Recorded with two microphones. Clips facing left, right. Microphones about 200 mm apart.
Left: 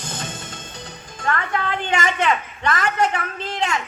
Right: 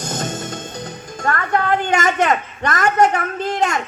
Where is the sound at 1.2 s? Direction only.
45° right (ahead or behind).